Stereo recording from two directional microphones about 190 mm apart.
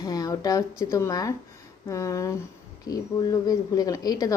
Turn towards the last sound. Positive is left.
turn(degrees=20)  # may be behind; listen again after turning